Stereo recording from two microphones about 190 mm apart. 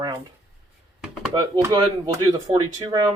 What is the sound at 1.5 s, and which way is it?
Speech, 20° right (ahead or behind).